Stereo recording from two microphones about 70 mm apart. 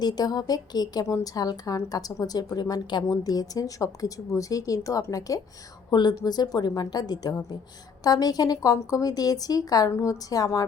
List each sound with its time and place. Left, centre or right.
0.0 s a woman's voice: left
5.9 s a woman's voice: left